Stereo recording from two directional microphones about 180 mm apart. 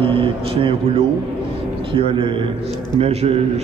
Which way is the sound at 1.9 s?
30° right (ahead or behind).